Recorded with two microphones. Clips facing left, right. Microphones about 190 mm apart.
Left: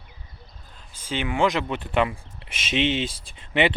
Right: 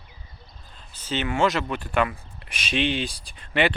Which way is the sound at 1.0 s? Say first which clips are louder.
Even; 10° left (ahead or behind).